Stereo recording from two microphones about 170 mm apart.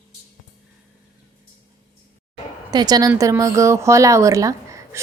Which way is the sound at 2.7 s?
25° right (ahead or behind).